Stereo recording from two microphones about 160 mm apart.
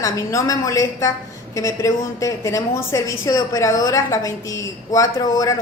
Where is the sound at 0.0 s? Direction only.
20° left (ahead or behind).